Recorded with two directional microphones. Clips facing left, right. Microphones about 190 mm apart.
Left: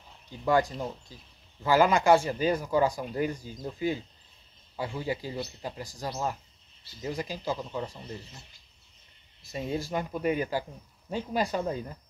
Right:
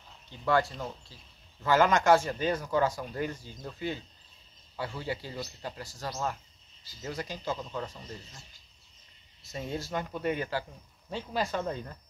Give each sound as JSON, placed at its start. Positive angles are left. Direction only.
{"t": 0.5, "sound": "speech", "side_deg": 15}
{"t": 9.4, "sound": "speech", "side_deg": 10}